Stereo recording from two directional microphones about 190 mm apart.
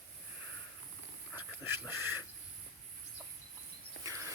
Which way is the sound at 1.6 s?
10° right (ahead or behind).